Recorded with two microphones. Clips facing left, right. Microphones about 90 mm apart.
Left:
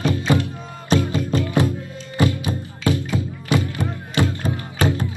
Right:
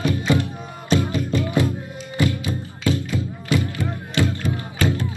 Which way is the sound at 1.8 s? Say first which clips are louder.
Right 1 dB; 20° right (ahead or behind).